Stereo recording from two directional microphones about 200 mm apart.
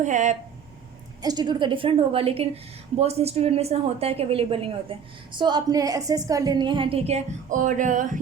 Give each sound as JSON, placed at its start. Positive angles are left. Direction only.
{"t": 0.0, "sound": "speech", "side_deg": -35}
{"t": 1.2, "sound": "a woman's voice", "side_deg": -20}